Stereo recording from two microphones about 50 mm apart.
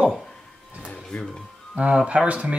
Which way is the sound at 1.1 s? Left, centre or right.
Centre.